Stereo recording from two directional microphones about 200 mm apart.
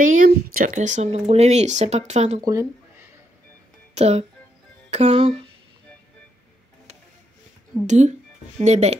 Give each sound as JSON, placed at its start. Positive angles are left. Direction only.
{"t": 0.0, "sound": "speech", "side_deg": -40}
{"t": 2.4, "sound": "a sound", "side_deg": -15}
{"t": 3.9, "sound": "speech", "side_deg": -30}
{"t": 7.8, "sound": "speech", "side_deg": -35}